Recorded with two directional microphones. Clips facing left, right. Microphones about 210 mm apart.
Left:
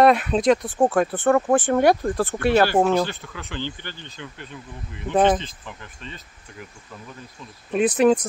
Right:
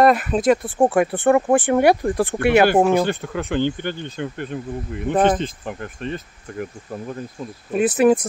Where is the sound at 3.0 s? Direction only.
50° right (ahead or behind).